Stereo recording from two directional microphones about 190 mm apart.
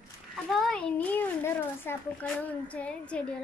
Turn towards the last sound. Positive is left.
turn(degrees=5)  # may be behind; listen again after turning